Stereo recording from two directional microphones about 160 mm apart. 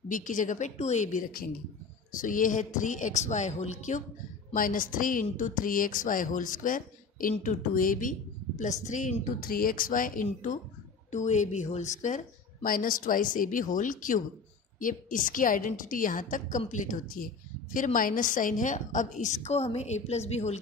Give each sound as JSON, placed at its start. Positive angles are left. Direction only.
{"t": 0.1, "sound": "a woman's voice", "side_deg": 55}
{"t": 4.6, "sound": "a woman's voice", "side_deg": 60}
{"t": 12.6, "sound": "a woman's voice", "side_deg": 60}